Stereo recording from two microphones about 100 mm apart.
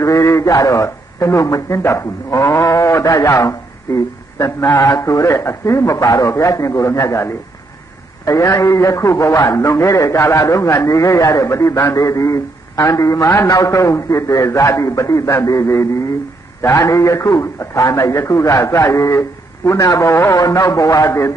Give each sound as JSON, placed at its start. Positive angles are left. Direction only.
{"t": 0.0, "sound": "a man's voice", "side_deg": 30}
{"t": 20.3, "sound": "a man's voice", "side_deg": 35}